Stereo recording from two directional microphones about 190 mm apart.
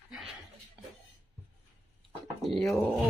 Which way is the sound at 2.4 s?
Centre (ahead or behind).